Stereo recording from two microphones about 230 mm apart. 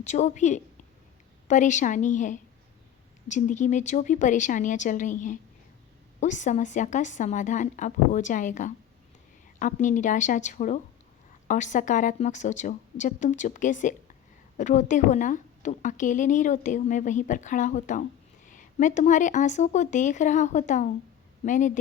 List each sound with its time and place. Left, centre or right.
0.0 s a woman's voice: left